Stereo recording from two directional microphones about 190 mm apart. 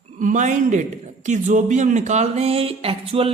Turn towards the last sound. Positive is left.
turn(degrees=-30)  # may be behind; listen again after turning